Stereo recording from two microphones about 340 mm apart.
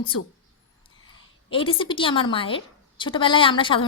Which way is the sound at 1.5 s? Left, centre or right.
Centre.